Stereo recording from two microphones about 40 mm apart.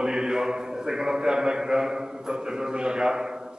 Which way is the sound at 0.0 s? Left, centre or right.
Centre.